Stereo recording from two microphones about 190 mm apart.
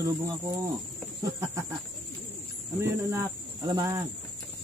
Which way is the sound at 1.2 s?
15° right (ahead or behind).